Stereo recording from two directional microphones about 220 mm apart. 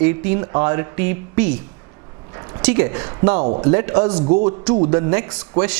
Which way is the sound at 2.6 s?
15° right (ahead or behind).